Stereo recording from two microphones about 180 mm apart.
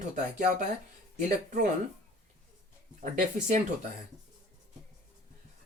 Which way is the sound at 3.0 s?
45° right (ahead or behind).